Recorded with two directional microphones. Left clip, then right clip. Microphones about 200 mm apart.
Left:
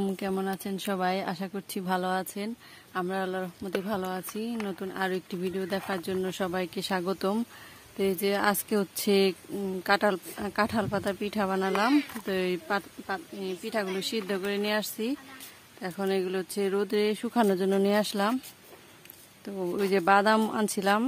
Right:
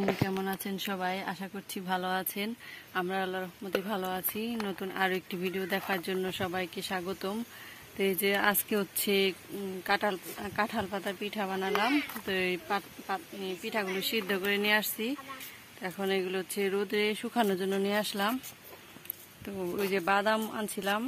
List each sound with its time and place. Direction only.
0.4 s speech: 40° left (ahead or behind)
8.0 s speech: 30° left (ahead or behind)
9.8 s speech: 45° left (ahead or behind)
19.9 s speech: 35° left (ahead or behind)